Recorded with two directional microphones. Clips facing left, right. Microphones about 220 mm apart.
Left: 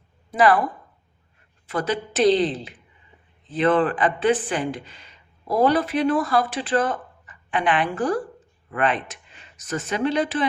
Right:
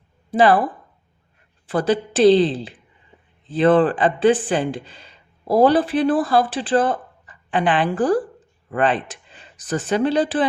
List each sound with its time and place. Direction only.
0.3 s speech: 30° right (ahead or behind)
1.6 s speech: 30° right (ahead or behind)